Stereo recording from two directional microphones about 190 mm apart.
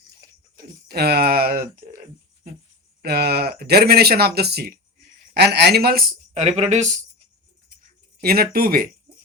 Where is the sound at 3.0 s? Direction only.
55° right (ahead or behind); by 7.1 s 35° right (ahead or behind).